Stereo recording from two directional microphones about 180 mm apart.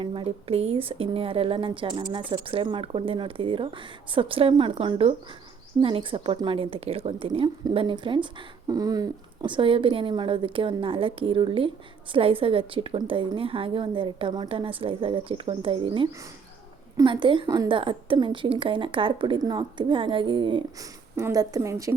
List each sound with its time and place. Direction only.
0.0 s a woman's voice: 30° right (ahead or behind)